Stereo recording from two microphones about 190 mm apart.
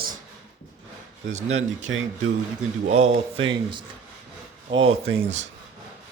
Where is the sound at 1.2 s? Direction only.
35° right (ahead or behind).